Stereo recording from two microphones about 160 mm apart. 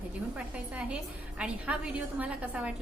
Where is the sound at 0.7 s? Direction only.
5° right (ahead or behind).